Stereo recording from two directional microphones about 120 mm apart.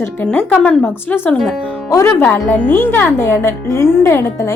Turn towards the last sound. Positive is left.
turn(degrees=25)  # may be behind; listen again after turning